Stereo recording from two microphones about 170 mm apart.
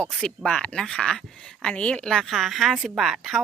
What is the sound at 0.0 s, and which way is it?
A woman's voice, centre (ahead or behind).